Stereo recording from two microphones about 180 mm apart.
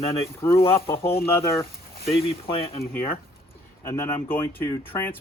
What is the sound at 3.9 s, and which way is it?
Speech, 15° left (ahead or behind).